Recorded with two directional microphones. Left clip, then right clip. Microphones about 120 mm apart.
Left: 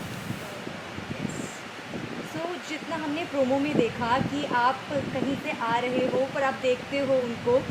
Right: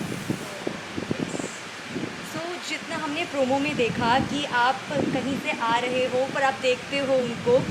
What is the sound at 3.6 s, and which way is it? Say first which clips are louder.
Female singing: right 2 dB; 35° right (ahead or behind).